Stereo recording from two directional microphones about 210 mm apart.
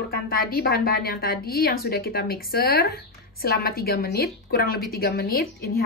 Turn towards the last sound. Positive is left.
turn(degrees=45)  # may be behind; listen again after turning